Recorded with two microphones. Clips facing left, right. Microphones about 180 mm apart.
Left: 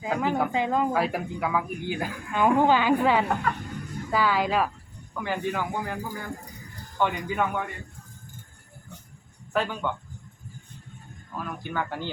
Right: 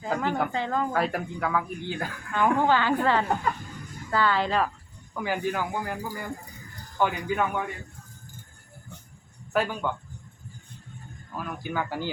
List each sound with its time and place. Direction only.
0.0 s speech: 5° left (ahead or behind)
0.5 s a woman's voice: 15° left (ahead or behind)
5.1 s speech: 5° right (ahead or behind)
9.5 s speech: 5° right (ahead or behind)
11.3 s speech: 5° right (ahead or behind)